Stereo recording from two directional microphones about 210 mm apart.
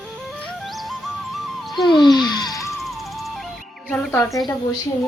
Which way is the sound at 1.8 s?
20° left (ahead or behind).